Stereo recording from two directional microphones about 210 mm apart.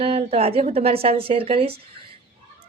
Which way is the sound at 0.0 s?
30° right (ahead or behind).